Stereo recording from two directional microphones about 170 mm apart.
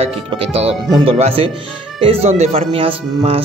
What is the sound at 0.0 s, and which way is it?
Speech, 40° right (ahead or behind).